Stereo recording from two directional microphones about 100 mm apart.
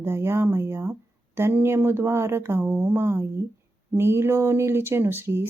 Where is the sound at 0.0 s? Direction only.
25° right (ahead or behind).